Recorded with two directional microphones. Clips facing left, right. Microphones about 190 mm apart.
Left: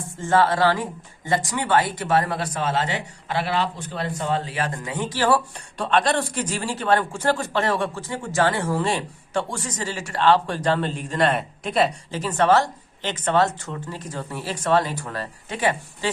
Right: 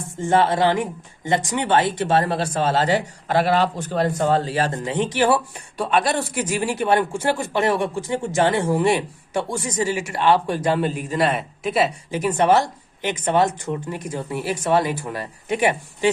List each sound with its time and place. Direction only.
0.2 s speech: 20° right (ahead or behind)
4.8 s speech: 20° right (ahead or behind)
5.7 s a man's voice: 5° right (ahead or behind)
12.1 s a man's voice: 15° right (ahead or behind)